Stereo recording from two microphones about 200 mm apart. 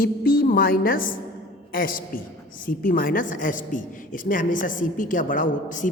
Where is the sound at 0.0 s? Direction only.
45° left (ahead or behind).